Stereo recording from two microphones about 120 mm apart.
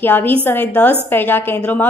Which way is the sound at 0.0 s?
15° left (ahead or behind).